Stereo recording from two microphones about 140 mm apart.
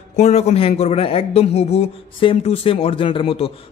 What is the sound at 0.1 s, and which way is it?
A man's voice, 50° left (ahead or behind).